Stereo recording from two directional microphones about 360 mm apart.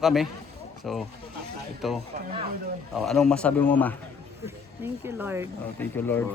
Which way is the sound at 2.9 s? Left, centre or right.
Centre.